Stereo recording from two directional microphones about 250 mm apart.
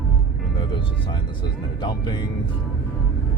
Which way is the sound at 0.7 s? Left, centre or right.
Centre.